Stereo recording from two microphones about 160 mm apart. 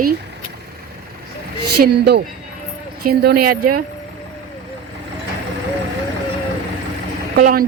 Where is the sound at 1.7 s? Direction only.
90° right.